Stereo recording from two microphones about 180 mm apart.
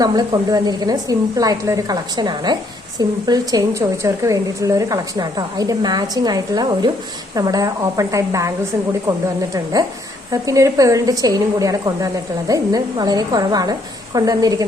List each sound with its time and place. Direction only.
0.0 s a woman's voice: 20° right (ahead or behind)